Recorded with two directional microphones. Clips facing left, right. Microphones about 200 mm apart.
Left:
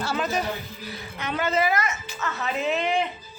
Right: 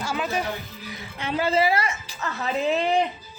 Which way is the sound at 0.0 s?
10° right (ahead or behind).